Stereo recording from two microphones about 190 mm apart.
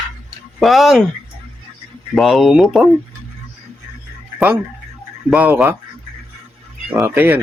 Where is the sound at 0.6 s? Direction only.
Centre (ahead or behind).